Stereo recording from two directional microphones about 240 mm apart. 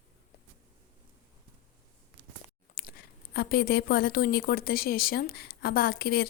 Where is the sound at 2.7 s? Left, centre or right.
Left.